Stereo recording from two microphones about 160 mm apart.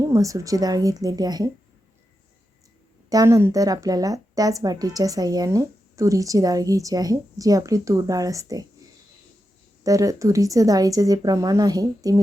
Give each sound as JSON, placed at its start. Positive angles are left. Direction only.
{"t": 0.0, "sound": "speech", "side_deg": -20}
{"t": 3.1, "sound": "speech", "side_deg": -20}
{"t": 9.8, "sound": "speech", "side_deg": -20}